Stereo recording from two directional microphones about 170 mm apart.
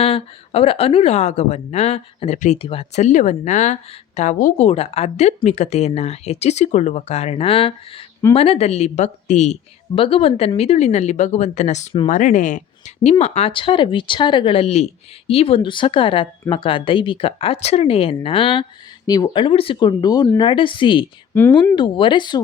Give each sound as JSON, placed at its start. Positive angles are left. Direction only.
{"t": 0.0, "sound": "speech", "side_deg": 35}
{"t": 21.3, "sound": "speech", "side_deg": 10}
{"t": 21.8, "sound": "speech", "side_deg": 30}